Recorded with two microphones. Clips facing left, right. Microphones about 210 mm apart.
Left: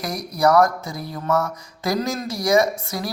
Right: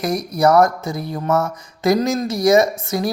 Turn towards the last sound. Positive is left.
turn(degrees=-20)  # may be behind; listen again after turning